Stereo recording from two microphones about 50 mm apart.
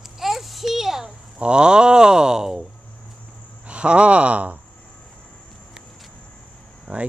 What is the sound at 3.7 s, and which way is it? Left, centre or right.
Speech, right.